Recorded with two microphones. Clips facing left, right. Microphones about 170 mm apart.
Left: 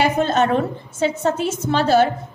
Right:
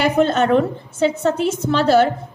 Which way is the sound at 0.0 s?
70° right (ahead or behind).